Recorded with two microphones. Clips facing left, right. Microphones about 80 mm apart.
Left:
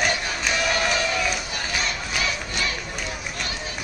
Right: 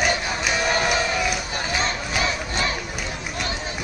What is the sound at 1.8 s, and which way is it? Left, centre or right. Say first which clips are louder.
Crowd: right 3 dB; right.